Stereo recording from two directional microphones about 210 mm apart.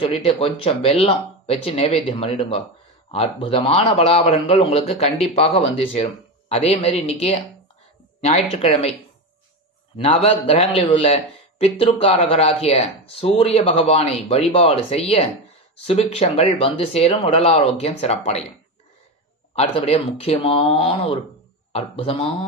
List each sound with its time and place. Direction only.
0.0 s a man's voice: 25° left (ahead or behind)
9.9 s a man's voice: 30° left (ahead or behind)
19.5 s a man's voice: 30° left (ahead or behind)